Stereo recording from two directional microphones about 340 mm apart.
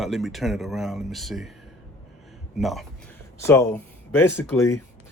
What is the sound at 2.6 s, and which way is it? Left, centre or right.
Speech, centre.